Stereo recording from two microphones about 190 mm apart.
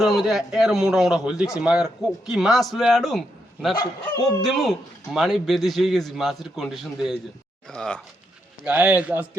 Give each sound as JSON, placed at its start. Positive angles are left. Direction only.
{"t": 0.0, "sound": "a man's voice", "side_deg": 0}
{"t": 3.8, "sound": "speech", "side_deg": 20}
{"t": 4.4, "sound": "a man's voice", "side_deg": 0}
{"t": 8.6, "sound": "a man's voice", "side_deg": -5}